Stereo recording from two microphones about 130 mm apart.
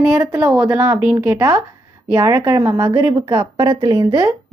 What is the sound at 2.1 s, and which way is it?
A woman's voice, 30° right (ahead or behind).